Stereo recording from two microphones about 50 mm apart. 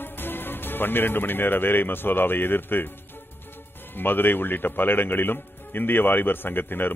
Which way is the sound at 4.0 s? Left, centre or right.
Left.